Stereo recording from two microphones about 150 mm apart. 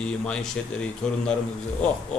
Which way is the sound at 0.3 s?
5° left (ahead or behind).